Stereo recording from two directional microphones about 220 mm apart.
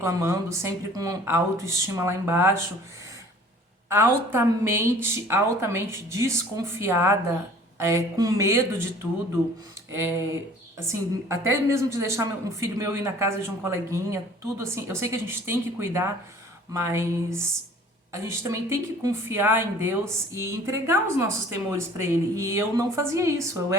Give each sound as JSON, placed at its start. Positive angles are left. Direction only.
{"t": 0.0, "sound": "speech", "side_deg": -15}
{"t": 3.8, "sound": "speech", "side_deg": -10}
{"t": 9.9, "sound": "speech", "side_deg": -10}